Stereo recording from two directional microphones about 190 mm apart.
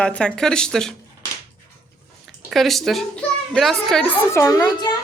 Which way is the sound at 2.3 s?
Centre (ahead or behind).